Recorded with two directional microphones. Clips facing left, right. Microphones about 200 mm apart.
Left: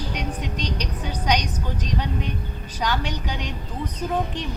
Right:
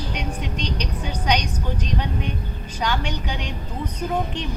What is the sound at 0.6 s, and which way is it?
Speech, 45° left (ahead or behind).